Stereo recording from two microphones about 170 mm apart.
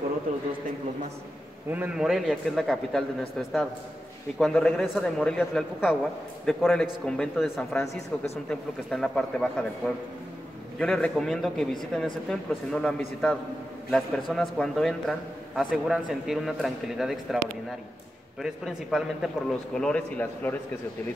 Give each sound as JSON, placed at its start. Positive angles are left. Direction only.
{"t": 1.7, "sound": "a man's voice", "side_deg": -5}
{"t": 7.7, "sound": "speech", "side_deg": 15}
{"t": 8.5, "sound": "a man's voice", "side_deg": 5}
{"t": 10.8, "sound": "a man's voice", "side_deg": 5}